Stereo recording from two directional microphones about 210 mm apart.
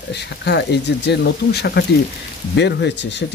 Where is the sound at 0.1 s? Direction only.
55° left (ahead or behind).